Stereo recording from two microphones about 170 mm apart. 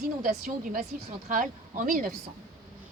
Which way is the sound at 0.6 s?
50° right (ahead or behind).